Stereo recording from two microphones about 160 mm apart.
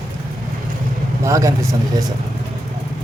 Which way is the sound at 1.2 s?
20° right (ahead or behind).